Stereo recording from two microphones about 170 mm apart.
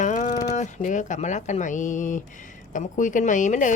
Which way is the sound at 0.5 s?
45° left (ahead or behind).